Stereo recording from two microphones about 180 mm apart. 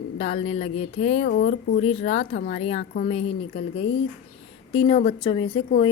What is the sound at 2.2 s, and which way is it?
Speech, 55° left (ahead or behind).